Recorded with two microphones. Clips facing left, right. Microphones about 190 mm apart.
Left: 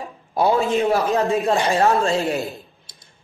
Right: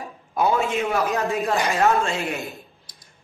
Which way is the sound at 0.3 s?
35° left (ahead or behind).